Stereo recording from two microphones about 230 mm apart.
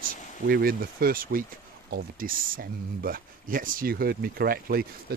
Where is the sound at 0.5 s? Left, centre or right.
Right.